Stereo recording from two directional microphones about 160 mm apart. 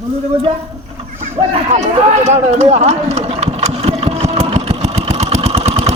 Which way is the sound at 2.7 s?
45° right (ahead or behind).